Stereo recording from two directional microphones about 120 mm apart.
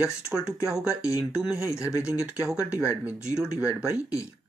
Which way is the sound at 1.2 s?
5° right (ahead or behind).